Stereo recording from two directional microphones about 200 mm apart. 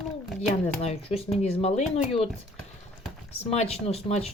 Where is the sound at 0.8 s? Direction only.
30° left (ahead or behind).